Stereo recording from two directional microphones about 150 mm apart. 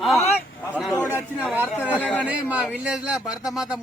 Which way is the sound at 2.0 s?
10° left (ahead or behind).